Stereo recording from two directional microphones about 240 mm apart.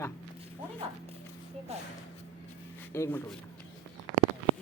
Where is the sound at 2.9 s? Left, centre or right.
Centre.